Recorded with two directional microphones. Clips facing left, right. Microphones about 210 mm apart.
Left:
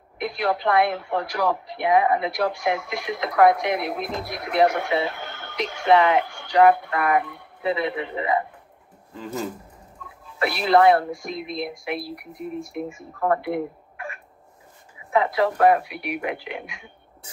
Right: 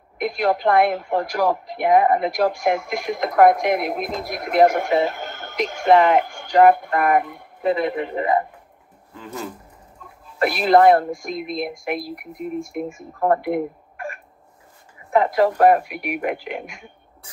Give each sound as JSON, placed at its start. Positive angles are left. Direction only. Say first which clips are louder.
{"t": 0.2, "sound": "speech", "louder": "right 4 dB", "side_deg": -45}
{"t": 10.4, "sound": "speech", "louder": "right 3 dB", "side_deg": -45}